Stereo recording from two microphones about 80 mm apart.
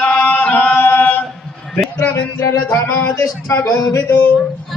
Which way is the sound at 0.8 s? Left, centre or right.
Left.